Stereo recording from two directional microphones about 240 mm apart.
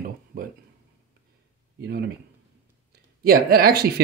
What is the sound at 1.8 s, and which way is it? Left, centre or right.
Speech, right.